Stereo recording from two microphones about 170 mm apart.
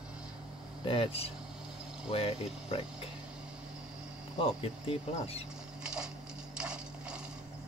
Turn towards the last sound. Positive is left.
turn(degrees=-5)  # may be behind; listen again after turning